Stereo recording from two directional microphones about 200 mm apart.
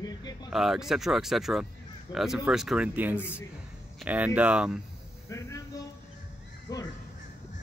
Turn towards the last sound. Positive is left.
turn(degrees=20)  # may be behind; listen again after turning